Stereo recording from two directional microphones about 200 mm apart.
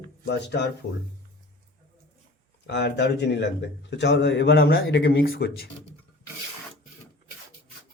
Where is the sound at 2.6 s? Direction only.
60° left (ahead or behind).